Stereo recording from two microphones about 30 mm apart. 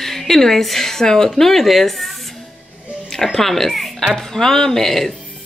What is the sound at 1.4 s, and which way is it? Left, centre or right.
A child's voice, centre.